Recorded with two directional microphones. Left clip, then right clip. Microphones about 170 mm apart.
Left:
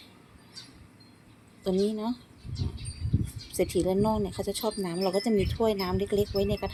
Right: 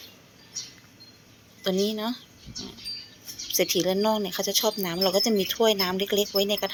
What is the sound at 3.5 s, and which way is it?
Speech, 5° left (ahead or behind).